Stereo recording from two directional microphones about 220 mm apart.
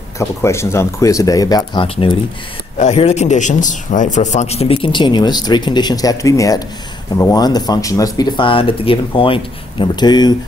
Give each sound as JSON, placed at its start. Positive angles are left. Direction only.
{"t": 0.2, "sound": "a man's voice", "side_deg": 10}